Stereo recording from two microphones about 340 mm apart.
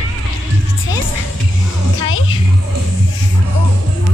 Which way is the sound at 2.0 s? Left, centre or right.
Left.